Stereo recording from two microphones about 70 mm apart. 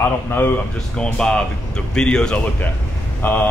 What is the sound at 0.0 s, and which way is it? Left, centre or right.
Speech, left.